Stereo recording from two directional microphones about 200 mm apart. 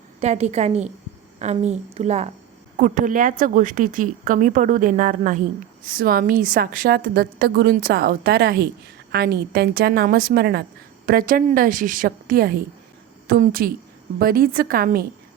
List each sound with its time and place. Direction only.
0.2 s a woman's voice: 35° right (ahead or behind)